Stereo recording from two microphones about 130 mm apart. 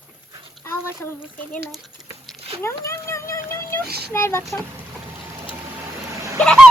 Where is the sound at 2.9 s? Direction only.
20° left (ahead or behind).